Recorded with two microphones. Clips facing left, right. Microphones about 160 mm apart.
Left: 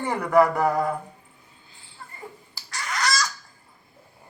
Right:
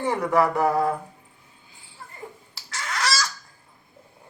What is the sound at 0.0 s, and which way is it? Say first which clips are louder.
Speech: left 2 dB; 5° right (ahead or behind).